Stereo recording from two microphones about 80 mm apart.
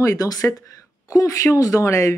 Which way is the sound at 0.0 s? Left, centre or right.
Left.